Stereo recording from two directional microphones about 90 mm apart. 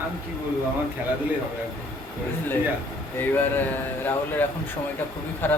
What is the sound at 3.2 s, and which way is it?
Speech, 25° left (ahead or behind).